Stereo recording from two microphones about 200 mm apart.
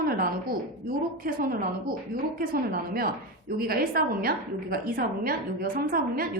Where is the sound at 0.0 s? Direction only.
45° right (ahead or behind).